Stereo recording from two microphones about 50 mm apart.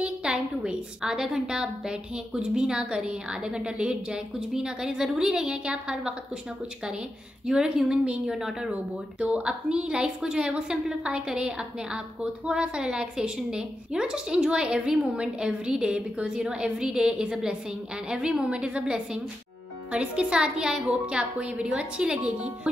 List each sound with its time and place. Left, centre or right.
0.0 s a woman's voice: centre
7.4 s a woman's voice: centre
8.4 s a woman's voice: centre
9.2 s a woman's voice: right